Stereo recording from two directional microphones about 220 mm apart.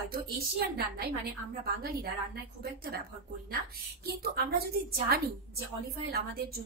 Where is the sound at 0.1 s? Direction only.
45° right (ahead or behind).